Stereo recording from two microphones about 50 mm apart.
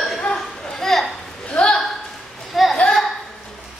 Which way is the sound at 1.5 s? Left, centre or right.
Centre.